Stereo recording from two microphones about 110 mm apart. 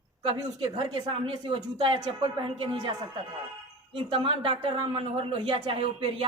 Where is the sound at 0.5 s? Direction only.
45° right (ahead or behind).